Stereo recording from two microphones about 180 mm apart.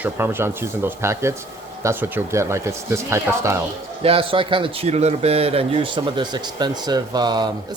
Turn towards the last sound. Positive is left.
turn(degrees=-25)  # may be behind; listen again after turning